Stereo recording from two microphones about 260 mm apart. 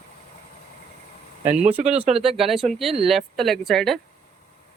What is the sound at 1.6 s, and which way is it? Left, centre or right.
Speech, centre.